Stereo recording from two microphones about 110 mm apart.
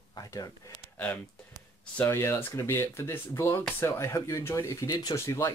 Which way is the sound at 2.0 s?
25° left (ahead or behind).